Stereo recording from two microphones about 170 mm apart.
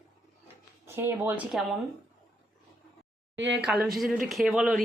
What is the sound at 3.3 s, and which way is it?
Speech, 90° right.